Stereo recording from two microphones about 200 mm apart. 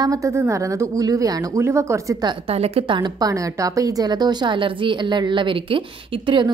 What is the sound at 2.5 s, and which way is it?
Speech, 30° right (ahead or behind).